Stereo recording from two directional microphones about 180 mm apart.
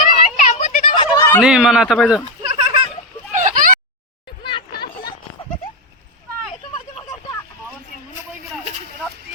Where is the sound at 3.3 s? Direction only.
45° right (ahead or behind).